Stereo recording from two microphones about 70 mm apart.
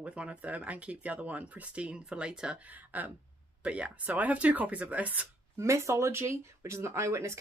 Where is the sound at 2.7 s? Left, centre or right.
Right.